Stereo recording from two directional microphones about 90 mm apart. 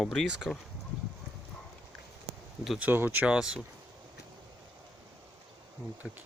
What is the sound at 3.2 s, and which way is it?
Speech, 10° right (ahead or behind).